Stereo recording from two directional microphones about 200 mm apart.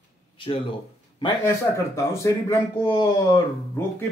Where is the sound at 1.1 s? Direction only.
20° left (ahead or behind).